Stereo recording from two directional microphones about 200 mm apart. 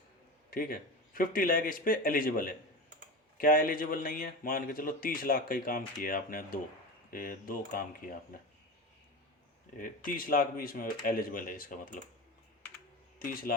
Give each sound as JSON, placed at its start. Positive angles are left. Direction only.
{"t": 0.5, "sound": "speech", "side_deg": 45}
{"t": 9.7, "sound": "speech", "side_deg": 45}
{"t": 13.1, "sound": "speech", "side_deg": 45}